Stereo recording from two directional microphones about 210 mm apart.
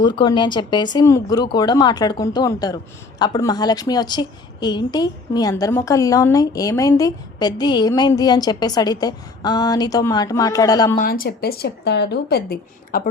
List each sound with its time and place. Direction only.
0.0 s a woman's voice: 20° left (ahead or behind)
10.9 s speech: 45° left (ahead or behind)